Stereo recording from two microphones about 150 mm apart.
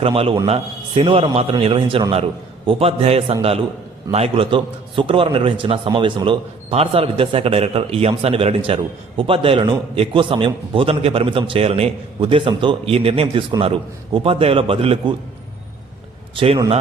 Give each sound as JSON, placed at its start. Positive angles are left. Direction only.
{"t": 0.0, "sound": "a man's voice", "side_deg": -40}
{"t": 16.3, "sound": "a man's voice", "side_deg": -40}